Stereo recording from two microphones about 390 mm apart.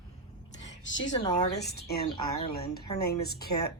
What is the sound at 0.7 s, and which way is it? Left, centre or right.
Speech, left.